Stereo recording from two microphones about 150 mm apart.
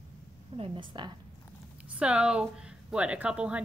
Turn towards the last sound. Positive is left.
turn(degrees=-5)  # may be behind; listen again after turning